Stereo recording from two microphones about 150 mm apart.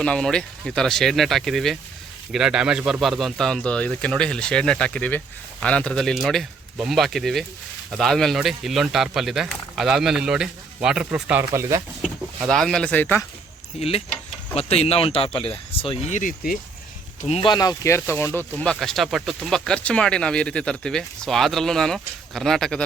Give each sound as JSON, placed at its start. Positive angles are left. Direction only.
{"t": 0.0, "sound": "speech", "side_deg": 5}
{"t": 12.5, "sound": "speech", "side_deg": 5}
{"t": 13.7, "sound": "speech", "side_deg": 40}
{"t": 16.1, "sound": "speech", "side_deg": 65}
{"t": 17.2, "sound": "speech", "side_deg": 40}
{"t": 17.5, "sound": "speech", "side_deg": 25}